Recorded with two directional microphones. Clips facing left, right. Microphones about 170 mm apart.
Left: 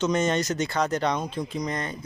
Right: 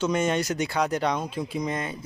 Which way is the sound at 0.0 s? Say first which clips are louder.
Left 1 dB; 10° right (ahead or behind).